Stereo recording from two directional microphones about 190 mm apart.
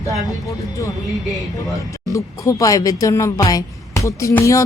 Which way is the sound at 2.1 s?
15° left (ahead or behind).